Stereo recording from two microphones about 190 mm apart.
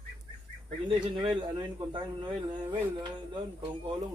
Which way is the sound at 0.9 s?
25° right (ahead or behind).